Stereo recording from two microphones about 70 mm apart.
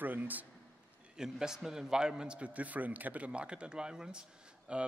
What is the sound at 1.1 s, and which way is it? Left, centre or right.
A man's voice, centre.